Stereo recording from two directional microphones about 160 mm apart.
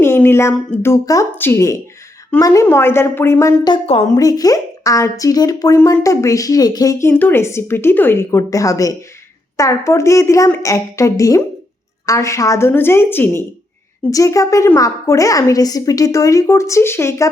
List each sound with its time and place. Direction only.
0.0 s speech: 15° left (ahead or behind)